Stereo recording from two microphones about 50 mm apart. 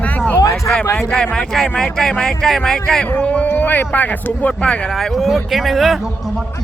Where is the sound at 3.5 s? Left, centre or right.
Left.